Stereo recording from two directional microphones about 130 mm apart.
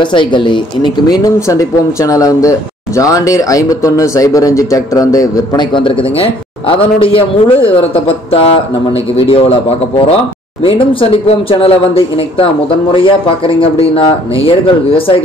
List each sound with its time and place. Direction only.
0.0 s speech: 40° left (ahead or behind)
1.0 s speech: 25° left (ahead or behind)
6.7 s a man's voice: 45° left (ahead or behind)
10.6 s a man's voice: 45° left (ahead or behind)
13.6 s a man's voice: 45° left (ahead or behind)